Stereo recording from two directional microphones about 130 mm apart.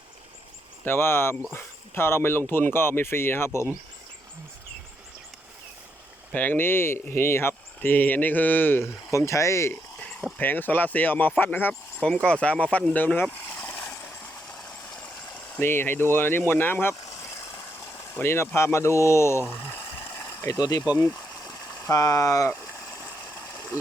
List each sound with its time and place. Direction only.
0.9 s speech: 20° left (ahead or behind)
6.3 s speech: 10° left (ahead or behind)
12.9 s a sound: 15° left (ahead or behind)
15.5 s speech: 15° left (ahead or behind)
18.1 s speech: 20° left (ahead or behind)
21.0 s stream: 25° left (ahead or behind)